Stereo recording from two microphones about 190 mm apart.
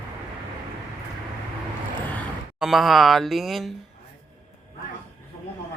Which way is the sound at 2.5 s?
Centre (ahead or behind).